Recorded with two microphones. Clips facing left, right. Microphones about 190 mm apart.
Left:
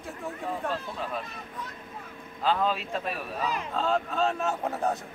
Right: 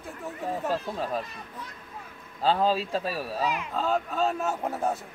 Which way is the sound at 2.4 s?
35° right (ahead or behind).